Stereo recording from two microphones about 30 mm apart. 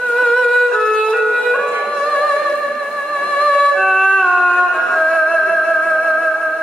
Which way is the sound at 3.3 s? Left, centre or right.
Left.